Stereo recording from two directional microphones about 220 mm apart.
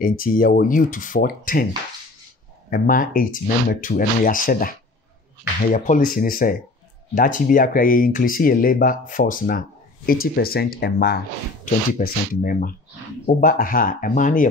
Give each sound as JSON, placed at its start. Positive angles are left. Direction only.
{"t": 0.0, "sound": "speech", "side_deg": 40}
{"t": 2.7, "sound": "speech", "side_deg": 40}